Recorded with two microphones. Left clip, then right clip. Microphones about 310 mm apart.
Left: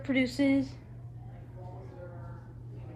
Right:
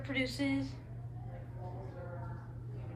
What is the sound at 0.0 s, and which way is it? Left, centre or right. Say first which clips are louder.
Speech: left 7 dB; left.